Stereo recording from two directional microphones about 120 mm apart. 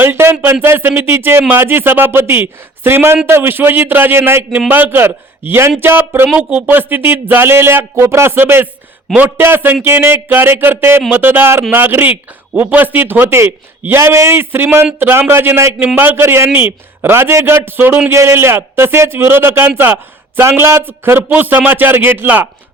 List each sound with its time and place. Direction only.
0.0 s a man's voice: 20° right (ahead or behind)